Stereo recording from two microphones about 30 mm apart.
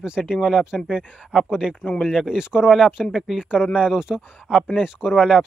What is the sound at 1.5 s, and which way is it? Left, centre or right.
Speech, right.